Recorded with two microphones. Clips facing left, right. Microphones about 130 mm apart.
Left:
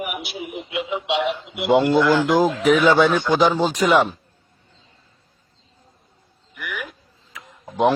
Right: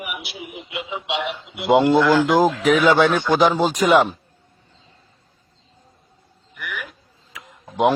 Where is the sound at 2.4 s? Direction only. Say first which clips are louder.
Even; centre (ahead or behind).